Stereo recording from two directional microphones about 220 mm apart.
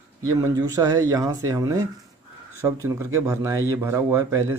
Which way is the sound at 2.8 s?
15° right (ahead or behind).